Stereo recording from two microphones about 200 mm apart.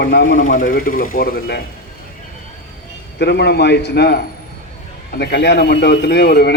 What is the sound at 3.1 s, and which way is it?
A man's voice, 55° left (ahead or behind).